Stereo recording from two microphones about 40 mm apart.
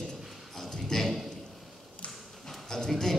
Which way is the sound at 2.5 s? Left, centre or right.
Centre.